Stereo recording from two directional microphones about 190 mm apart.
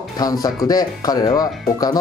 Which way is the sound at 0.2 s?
20° left (ahead or behind).